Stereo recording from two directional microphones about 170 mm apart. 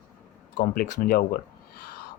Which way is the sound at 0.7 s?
60° left (ahead or behind).